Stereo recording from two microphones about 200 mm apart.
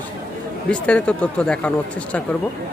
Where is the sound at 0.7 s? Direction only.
5° left (ahead or behind).